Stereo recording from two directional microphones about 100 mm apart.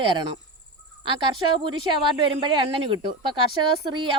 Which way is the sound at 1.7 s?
55° right (ahead or behind).